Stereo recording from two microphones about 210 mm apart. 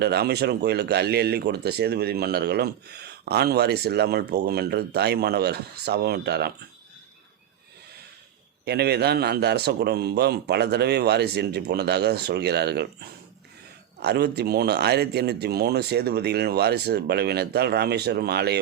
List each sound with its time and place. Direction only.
0.0 s speech: 50° right (ahead or behind)
8.6 s speech: 50° right (ahead or behind)